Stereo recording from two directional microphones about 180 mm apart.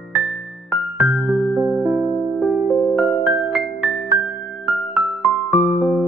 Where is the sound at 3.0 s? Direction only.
15° right (ahead or behind).